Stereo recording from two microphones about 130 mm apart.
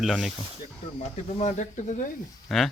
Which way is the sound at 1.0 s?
55° left (ahead or behind).